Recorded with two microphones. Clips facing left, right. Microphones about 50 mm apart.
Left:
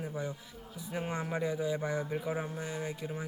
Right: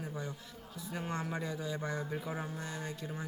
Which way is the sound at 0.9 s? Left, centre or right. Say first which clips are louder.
Left 3 dB; centre.